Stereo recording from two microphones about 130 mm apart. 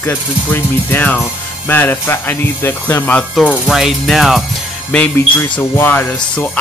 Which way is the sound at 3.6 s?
5° right (ahead or behind).